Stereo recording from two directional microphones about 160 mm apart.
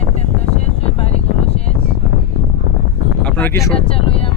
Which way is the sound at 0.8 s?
40° left (ahead or behind).